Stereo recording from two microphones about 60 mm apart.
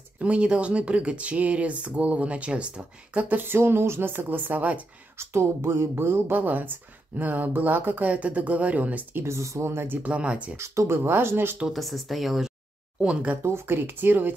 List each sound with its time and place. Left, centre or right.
0.2 s speech: centre
3.2 s speech: right
5.3 s speech: right
9.1 s speech: right
10.0 s speech: centre
10.6 s speech: right
11.7 s speech: centre
13.0 s speech: centre
13.4 s speech: right